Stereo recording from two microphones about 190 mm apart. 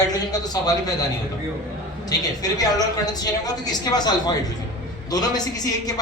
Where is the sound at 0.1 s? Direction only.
20° left (ahead or behind).